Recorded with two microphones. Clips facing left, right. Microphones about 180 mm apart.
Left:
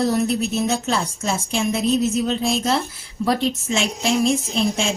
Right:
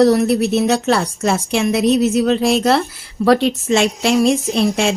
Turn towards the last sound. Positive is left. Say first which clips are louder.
# right 5 dB
turn(degrees=-70)  # may be behind; listen again after turning